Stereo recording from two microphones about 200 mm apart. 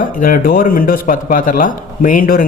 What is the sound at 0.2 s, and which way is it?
A man's voice, 40° left (ahead or behind).